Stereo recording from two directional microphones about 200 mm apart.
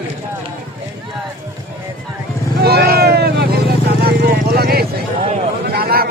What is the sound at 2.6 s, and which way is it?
Vehicle, 55° right (ahead or behind).